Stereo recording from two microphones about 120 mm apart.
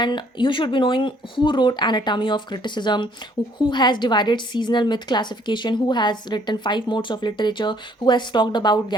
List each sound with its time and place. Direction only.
0.0 s a woman's voice: 40° left (ahead or behind)